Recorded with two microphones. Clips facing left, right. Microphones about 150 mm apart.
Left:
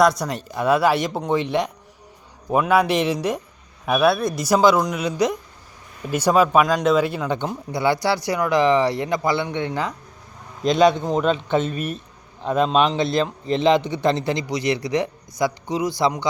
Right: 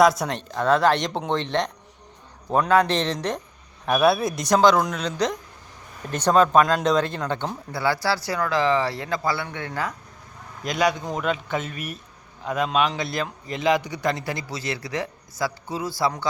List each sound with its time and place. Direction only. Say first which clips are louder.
0.0 s a man's voice: even; centre (ahead or behind); by 16.2 s 20° left (ahead or behind)